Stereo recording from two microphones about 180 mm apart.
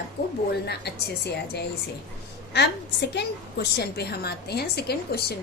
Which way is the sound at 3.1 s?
65° left (ahead or behind).